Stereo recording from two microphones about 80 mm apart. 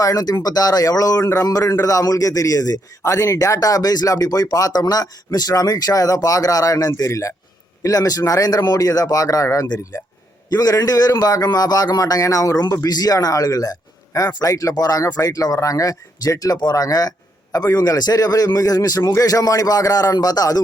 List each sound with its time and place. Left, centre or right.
0.0 s a man's voice: left